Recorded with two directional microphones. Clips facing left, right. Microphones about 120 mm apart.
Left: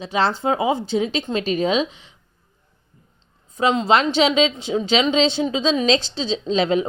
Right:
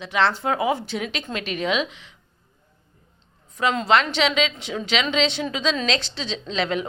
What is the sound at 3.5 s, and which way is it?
A woman's voice, 25° left (ahead or behind).